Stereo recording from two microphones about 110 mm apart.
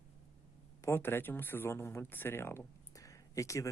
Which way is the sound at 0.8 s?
25° left (ahead or behind).